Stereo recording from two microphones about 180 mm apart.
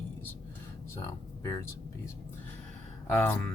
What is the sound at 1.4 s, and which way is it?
Speech, 15° left (ahead or behind).